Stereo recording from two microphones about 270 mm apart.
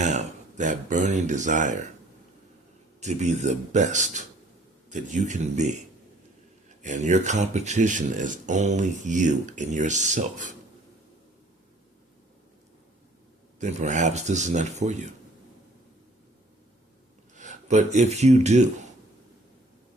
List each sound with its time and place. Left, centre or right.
0.0 s speech: right
3.0 s speech: right
6.8 s speech: right
13.6 s speech: right
17.3 s speech: right